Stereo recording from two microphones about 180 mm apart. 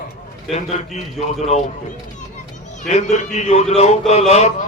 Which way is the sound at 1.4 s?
35° left (ahead or behind).